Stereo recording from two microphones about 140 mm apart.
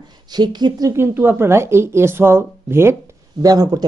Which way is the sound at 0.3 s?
30° right (ahead or behind).